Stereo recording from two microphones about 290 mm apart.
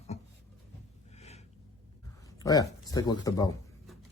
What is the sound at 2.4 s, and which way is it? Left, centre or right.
Speech, centre.